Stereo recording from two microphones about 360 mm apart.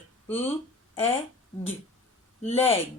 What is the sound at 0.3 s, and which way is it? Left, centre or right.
Speech, centre.